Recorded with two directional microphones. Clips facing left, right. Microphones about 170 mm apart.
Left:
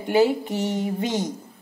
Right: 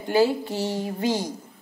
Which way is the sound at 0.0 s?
20° left (ahead or behind).